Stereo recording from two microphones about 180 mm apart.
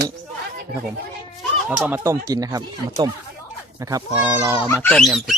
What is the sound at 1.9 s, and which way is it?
Speech, 15° right (ahead or behind).